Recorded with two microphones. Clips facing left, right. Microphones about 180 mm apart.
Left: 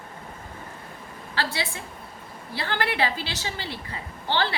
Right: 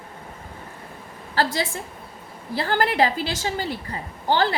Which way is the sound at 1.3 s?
45° right (ahead or behind).